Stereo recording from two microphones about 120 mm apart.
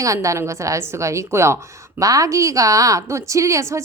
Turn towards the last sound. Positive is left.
turn(degrees=-25)  # may be behind; listen again after turning